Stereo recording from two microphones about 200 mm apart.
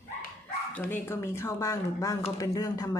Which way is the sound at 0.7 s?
10° left (ahead or behind).